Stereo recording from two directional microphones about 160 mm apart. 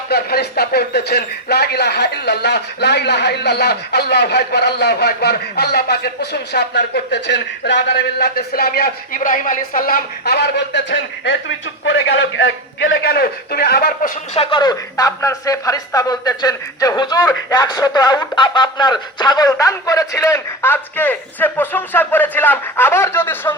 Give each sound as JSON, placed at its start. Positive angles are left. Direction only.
{"t": 0.1, "sound": "a man's voice", "side_deg": 80}
{"t": 13.1, "sound": "a man's voice", "side_deg": 75}
{"t": 14.3, "sound": "speech", "side_deg": 30}